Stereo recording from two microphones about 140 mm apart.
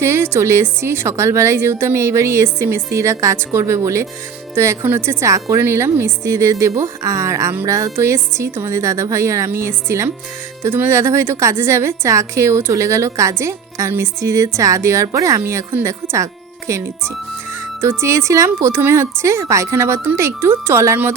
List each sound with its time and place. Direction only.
0.0 s a woman's voice: 20° right (ahead or behind)